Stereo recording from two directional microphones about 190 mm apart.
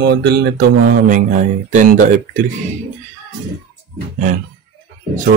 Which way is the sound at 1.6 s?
45° right (ahead or behind).